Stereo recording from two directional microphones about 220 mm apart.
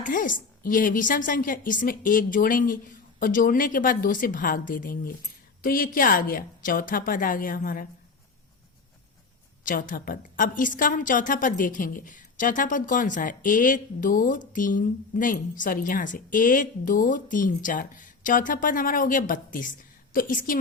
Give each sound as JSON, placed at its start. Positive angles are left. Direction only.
{"t": 0.0, "sound": "a woman's voice", "side_deg": 35}
{"t": 9.6, "sound": "a woman's voice", "side_deg": 40}